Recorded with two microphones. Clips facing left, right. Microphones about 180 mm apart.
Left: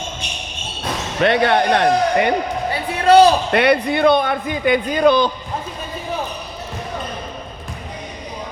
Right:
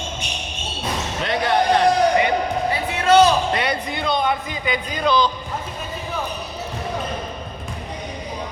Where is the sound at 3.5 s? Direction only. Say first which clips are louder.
Left 8 dB; 65° left (ahead or behind).